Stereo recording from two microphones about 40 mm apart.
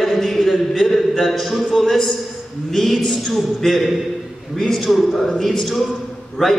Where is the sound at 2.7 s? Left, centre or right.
Centre.